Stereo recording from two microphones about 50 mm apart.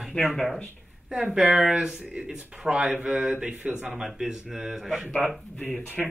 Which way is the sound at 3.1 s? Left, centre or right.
Right.